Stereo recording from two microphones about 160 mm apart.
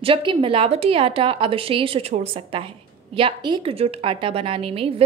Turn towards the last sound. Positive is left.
turn(degrees=-35)  # may be behind; listen again after turning